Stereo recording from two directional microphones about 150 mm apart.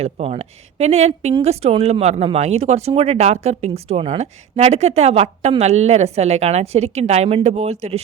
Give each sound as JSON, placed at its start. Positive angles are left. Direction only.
{"t": 0.0, "sound": "speech", "side_deg": -45}